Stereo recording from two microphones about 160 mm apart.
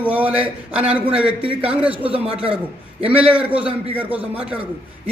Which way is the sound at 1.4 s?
35° right (ahead or behind).